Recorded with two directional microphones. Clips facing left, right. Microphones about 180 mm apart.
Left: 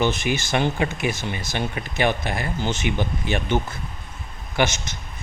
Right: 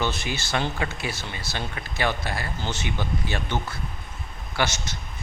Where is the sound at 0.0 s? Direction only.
15° left (ahead or behind).